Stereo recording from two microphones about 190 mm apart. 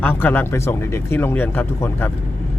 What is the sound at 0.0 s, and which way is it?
Speech, 10° left (ahead or behind).